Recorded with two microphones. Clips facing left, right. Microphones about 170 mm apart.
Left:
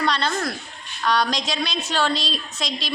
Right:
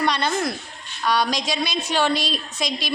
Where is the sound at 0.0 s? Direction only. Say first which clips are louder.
Right 1 dB; 15° right (ahead or behind).